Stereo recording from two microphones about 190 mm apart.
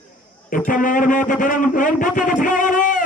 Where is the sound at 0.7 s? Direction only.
45° left (ahead or behind).